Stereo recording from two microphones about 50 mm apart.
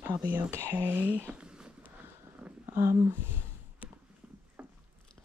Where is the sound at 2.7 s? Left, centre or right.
Right.